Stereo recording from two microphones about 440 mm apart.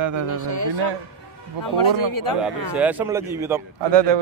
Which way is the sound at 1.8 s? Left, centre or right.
Left.